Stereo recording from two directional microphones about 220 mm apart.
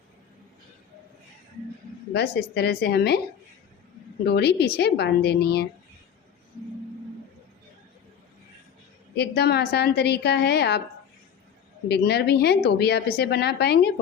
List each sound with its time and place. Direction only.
2.1 s speech: 45° left (ahead or behind)
4.3 s speech: 50° left (ahead or behind)
9.1 s speech: 50° left (ahead or behind)
11.9 s speech: 50° left (ahead or behind)